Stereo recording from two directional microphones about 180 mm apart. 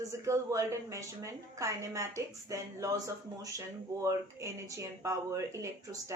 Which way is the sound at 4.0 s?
15° right (ahead or behind).